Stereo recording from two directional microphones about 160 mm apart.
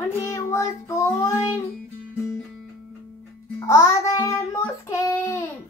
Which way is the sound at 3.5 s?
15° left (ahead or behind).